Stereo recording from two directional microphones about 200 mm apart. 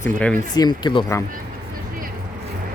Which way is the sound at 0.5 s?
20° left (ahead or behind).